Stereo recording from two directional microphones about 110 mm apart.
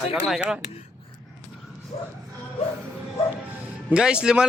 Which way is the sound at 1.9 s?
65° left (ahead or behind).